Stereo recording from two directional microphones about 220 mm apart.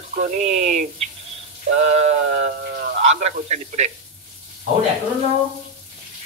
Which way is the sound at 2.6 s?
45° right (ahead or behind).